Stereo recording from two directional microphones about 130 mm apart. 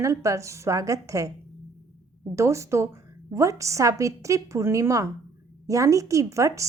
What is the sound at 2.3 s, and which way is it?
A woman's voice, 20° right (ahead or behind).